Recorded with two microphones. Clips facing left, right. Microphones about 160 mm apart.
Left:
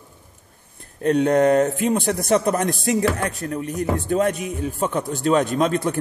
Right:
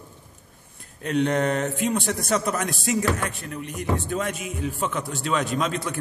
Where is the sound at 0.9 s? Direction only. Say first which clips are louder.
Left 6 dB; 40° left (ahead or behind).